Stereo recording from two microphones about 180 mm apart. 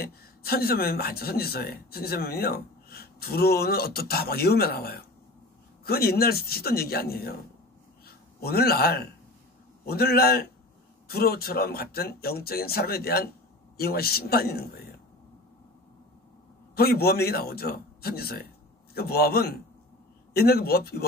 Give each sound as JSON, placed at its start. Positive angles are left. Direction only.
{"t": 0.0, "sound": "speech", "side_deg": 60}
{"t": 8.4, "sound": "speech", "side_deg": 60}
{"t": 16.7, "sound": "speech", "side_deg": 60}